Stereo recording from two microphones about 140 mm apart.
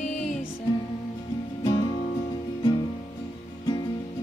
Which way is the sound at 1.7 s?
35° left (ahead or behind).